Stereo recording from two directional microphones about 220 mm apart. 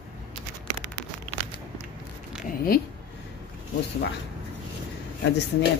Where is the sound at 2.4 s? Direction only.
40° left (ahead or behind).